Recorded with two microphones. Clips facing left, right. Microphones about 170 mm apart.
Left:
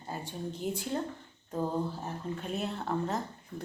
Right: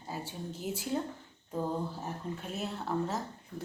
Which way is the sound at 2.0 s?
5° right (ahead or behind).